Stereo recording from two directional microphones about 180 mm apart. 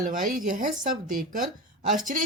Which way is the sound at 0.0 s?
50° right (ahead or behind).